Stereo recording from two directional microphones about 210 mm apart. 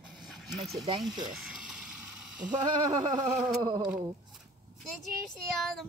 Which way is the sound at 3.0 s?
20° right (ahead or behind).